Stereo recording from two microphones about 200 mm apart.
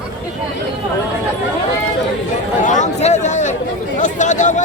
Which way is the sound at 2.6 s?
35° left (ahead or behind).